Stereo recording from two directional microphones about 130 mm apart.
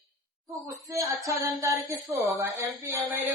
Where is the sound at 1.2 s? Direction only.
25° right (ahead or behind).